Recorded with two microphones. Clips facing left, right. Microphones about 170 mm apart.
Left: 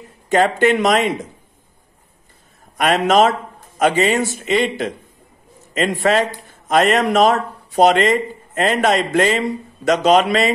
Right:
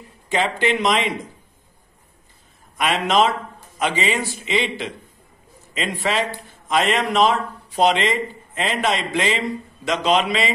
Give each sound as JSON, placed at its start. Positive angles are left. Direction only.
{"t": 0.3, "sound": "a man's voice", "side_deg": 50}
{"t": 2.8, "sound": "a man's voice", "side_deg": 50}